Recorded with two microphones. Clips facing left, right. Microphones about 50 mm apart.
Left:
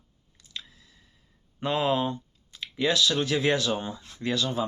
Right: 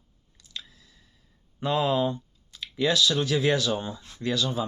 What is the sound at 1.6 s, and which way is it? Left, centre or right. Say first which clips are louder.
Speech: right 1 dB; left.